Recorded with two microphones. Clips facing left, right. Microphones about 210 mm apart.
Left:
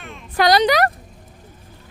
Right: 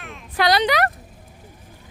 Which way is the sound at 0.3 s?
40° left (ahead or behind).